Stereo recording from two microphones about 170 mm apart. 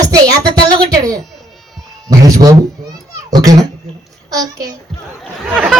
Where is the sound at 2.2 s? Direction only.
20° right (ahead or behind).